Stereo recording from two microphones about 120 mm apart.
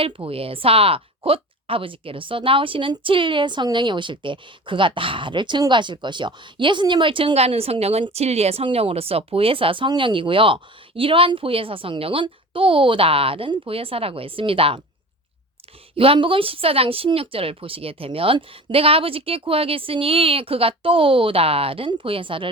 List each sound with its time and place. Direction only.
0.0 s speech: 50° right (ahead or behind)
16.0 s speech: 45° right (ahead or behind)